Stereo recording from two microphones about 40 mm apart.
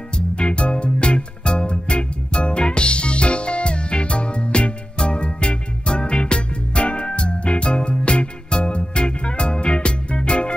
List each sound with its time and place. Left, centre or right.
0.4 s music: left